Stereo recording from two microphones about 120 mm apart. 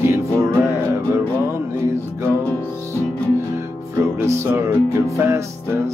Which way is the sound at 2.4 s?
20° left (ahead or behind).